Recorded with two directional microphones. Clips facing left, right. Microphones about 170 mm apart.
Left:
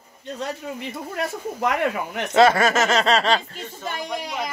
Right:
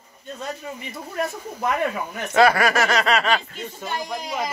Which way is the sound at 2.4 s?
25° left (ahead or behind).